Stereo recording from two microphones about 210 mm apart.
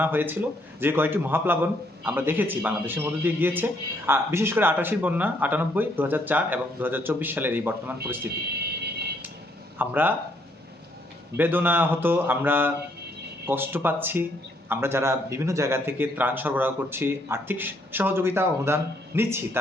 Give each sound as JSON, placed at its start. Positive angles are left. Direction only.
{"t": 0.0, "sound": "a man's voice", "side_deg": -10}
{"t": 9.7, "sound": "a man's voice", "side_deg": -10}
{"t": 11.3, "sound": "a man's voice", "side_deg": -10}